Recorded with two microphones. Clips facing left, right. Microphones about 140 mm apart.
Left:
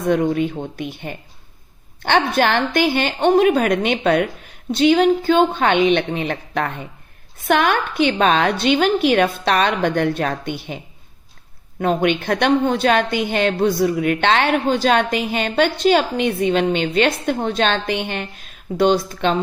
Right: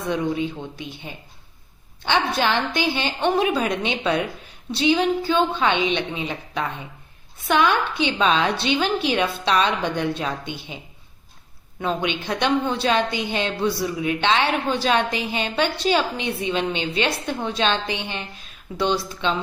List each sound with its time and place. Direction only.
0.0 s a woman's voice: 50° left (ahead or behind)
11.8 s a woman's voice: 50° left (ahead or behind)